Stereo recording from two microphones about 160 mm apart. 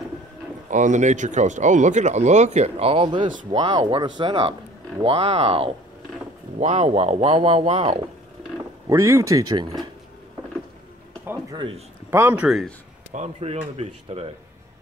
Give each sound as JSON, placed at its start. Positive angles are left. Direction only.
{"t": 0.7, "sound": "speech", "side_deg": -50}
{"t": 6.6, "sound": "speech", "side_deg": -45}
{"t": 8.8, "sound": "speech", "side_deg": -20}
{"t": 11.5, "sound": "speech", "side_deg": -35}
{"t": 12.1, "sound": "speech", "side_deg": -15}
{"t": 13.1, "sound": "speech", "side_deg": -45}